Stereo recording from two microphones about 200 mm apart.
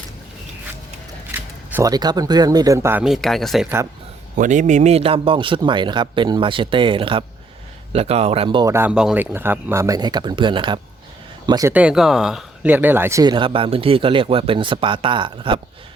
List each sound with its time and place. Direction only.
1.7 s speech: 20° right (ahead or behind)
3.0 s speech: centre (ahead or behind)
4.4 s speech: 40° right (ahead or behind); by 11.7 s 20° right (ahead or behind)
11.7 s speech: 5° right (ahead or behind); by 15.6 s 25° right (ahead or behind)